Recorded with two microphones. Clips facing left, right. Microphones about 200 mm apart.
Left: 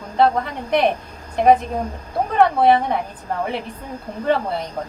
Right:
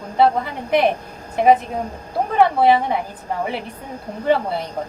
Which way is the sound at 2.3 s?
Centre (ahead or behind).